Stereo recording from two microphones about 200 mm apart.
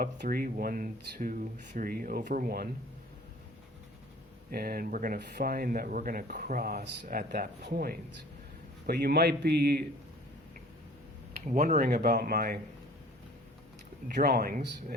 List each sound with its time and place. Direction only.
0.0 s speech: 45° right (ahead or behind)
4.5 s speech: 45° right (ahead or behind)
11.3 s speech: 45° right (ahead or behind)
14.1 s speech: 50° right (ahead or behind)